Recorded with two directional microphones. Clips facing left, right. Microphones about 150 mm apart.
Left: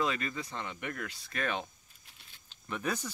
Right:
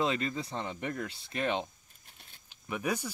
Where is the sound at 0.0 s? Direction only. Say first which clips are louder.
Right 2 dB; 25° right (ahead or behind).